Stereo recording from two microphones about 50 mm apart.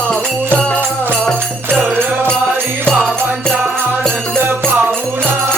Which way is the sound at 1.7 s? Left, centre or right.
Right.